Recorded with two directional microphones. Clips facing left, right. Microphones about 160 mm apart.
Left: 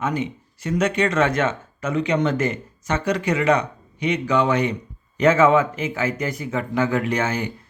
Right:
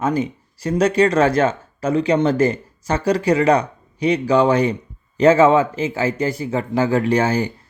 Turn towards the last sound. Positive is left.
turn(degrees=-35)  # may be behind; listen again after turning